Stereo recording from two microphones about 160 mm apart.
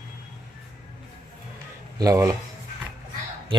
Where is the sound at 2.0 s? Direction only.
20° right (ahead or behind).